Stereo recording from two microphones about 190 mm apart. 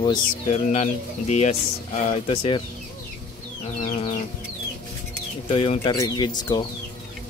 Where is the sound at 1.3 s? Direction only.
35° left (ahead or behind).